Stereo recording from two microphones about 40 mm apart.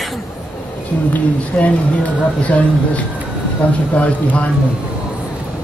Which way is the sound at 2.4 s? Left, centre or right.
Left.